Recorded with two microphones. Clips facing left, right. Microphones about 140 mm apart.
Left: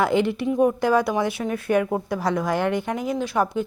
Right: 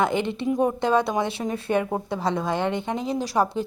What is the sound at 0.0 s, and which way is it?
A woman's voice, 20° right (ahead or behind).